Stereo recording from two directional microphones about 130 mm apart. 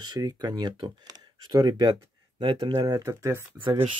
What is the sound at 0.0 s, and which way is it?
Speech, 30° right (ahead or behind).